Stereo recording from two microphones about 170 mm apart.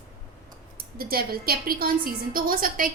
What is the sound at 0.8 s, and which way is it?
A woman's voice, 60° right (ahead or behind).